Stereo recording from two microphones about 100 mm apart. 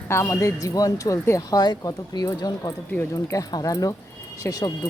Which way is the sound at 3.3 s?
35° left (ahead or behind).